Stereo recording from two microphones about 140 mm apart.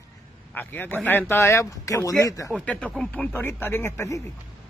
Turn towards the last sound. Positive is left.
turn(degrees=15)  # may be behind; listen again after turning